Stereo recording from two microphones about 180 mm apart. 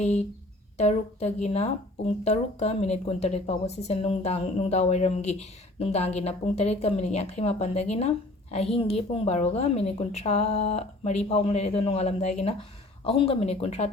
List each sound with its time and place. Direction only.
0.0 s speech: 40° left (ahead or behind)